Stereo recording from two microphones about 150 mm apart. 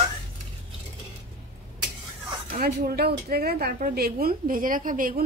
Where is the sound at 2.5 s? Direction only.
90° right.